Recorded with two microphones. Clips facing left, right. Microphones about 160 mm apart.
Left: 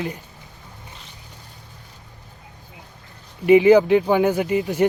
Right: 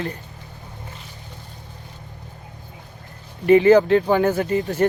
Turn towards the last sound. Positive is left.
turn(degrees=15)  # may be behind; listen again after turning